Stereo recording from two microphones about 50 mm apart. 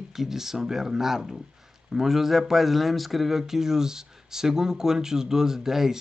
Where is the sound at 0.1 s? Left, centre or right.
Centre.